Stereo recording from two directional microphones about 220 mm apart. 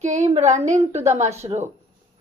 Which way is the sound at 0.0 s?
35° right (ahead or behind).